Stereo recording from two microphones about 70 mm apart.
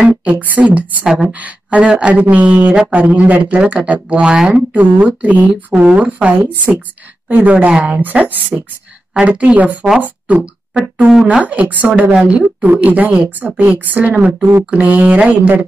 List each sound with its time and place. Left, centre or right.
0.2 s speech: right
1.0 s speech: centre
1.3 s speech: right
11.2 s speech: right